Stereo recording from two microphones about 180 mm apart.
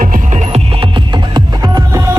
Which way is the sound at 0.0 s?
50° right (ahead or behind).